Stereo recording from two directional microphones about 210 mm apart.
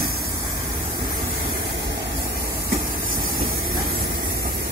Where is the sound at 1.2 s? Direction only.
45° right (ahead or behind).